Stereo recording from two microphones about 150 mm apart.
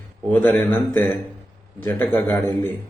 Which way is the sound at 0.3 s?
10° left (ahead or behind).